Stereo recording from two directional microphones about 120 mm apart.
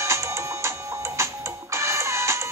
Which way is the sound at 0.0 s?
25° right (ahead or behind).